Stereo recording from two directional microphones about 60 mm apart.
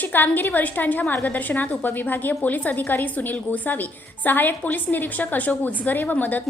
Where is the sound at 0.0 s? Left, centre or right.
Left.